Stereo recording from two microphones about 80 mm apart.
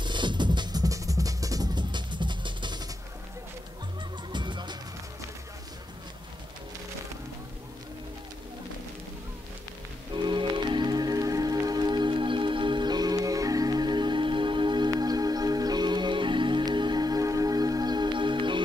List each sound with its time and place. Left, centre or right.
0.0 s music: right
1.8 s music: right
4.3 s music: right
10.2 s music: right
14.9 s music: right